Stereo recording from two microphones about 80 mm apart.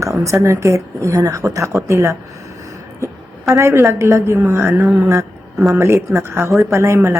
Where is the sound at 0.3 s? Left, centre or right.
Right.